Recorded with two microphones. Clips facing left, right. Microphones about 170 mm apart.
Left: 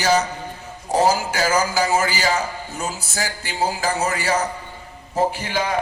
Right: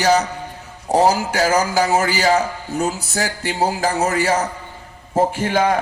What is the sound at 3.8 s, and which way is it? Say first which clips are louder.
Speech: right 3 dB; 40° right (ahead or behind).